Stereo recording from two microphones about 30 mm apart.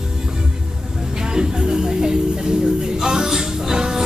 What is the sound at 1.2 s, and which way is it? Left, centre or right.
Music, right.